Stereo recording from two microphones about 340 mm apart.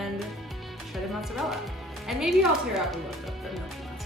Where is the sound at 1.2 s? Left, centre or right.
Centre.